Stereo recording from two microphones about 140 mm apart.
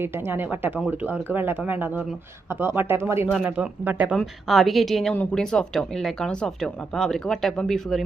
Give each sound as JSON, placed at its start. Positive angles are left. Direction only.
{"t": 0.0, "sound": "speech", "side_deg": -15}
{"t": 4.2, "sound": "speech", "side_deg": 0}